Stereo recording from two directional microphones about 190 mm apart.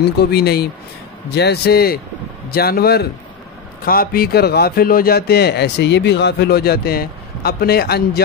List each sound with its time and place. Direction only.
0.2 s a man's voice: 55° left (ahead or behind)